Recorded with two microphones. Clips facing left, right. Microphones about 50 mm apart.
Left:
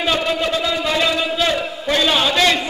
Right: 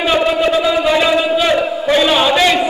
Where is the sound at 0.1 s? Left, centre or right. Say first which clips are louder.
Right 7 dB; centre.